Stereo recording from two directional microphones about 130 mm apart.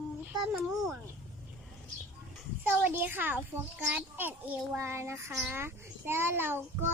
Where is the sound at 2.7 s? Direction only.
15° right (ahead or behind).